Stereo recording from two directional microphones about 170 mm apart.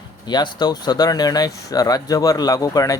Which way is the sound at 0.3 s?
25° left (ahead or behind).